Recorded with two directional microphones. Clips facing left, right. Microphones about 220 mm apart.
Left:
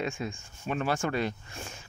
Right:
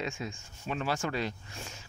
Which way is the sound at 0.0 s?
55° left (ahead or behind).